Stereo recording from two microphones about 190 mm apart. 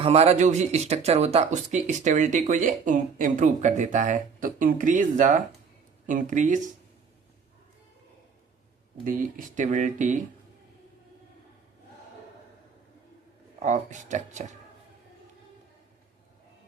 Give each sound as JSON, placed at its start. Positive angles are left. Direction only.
{"t": 0.0, "sound": "speech", "side_deg": -35}
{"t": 9.0, "sound": "speech", "side_deg": -45}
{"t": 13.6, "sound": "speech", "side_deg": -40}